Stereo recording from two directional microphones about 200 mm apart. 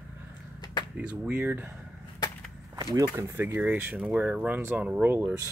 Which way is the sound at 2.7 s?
20° right (ahead or behind).